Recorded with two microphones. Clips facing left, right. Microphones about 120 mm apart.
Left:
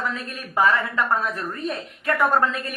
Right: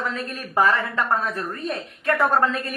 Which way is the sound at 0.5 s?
35° right (ahead or behind).